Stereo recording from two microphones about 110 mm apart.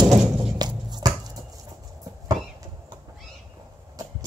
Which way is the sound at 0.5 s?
40° right (ahead or behind).